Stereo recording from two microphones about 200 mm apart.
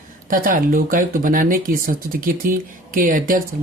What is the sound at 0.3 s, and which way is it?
Speech, 45° right (ahead or behind).